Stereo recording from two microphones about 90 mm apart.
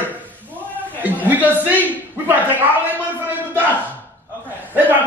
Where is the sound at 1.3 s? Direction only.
20° right (ahead or behind).